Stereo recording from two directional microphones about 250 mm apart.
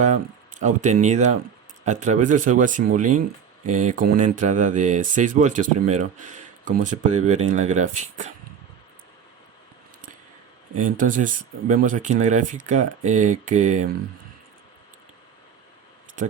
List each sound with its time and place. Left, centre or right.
0.0 s speech: right
10.9 s speech: right